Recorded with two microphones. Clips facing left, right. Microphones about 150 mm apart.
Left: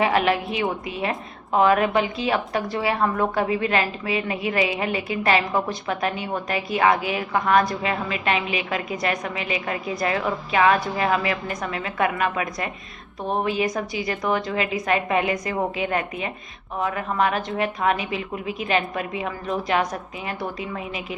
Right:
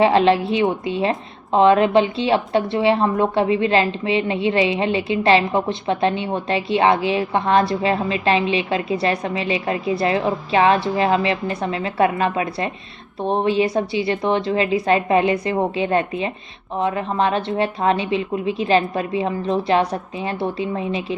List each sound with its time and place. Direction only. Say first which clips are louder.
0.0 s a woman's voice: right 6 dB; 30° right (ahead or behind)